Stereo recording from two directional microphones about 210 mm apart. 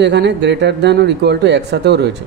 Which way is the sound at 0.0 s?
55° right (ahead or behind).